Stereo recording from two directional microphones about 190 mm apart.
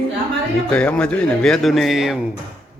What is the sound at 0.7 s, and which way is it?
Speech, 5° left (ahead or behind).